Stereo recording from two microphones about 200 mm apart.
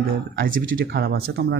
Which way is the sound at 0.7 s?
50° right (ahead or behind).